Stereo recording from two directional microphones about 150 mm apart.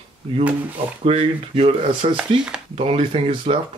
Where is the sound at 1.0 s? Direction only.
40° right (ahead or behind).